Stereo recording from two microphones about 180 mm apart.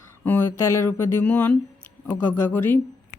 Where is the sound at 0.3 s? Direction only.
10° left (ahead or behind).